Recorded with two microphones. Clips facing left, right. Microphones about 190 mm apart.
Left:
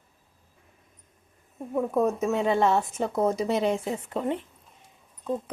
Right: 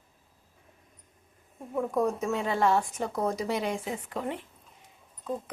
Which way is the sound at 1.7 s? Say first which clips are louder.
Left 3 dB; 20° left (ahead or behind).